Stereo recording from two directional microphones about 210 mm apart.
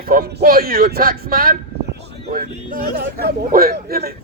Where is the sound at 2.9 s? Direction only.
45° right (ahead or behind).